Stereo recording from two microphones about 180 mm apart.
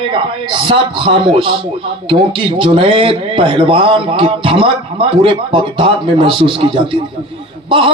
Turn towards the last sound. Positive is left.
turn(degrees=-30)  # may be behind; listen again after turning